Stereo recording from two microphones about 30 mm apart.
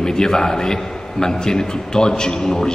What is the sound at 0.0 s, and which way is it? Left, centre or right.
A man's voice, left.